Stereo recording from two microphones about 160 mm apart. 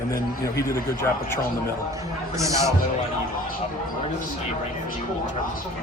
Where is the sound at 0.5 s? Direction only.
15° left (ahead or behind).